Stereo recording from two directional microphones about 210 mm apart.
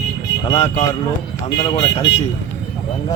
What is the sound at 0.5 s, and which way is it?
Speech, 30° left (ahead or behind).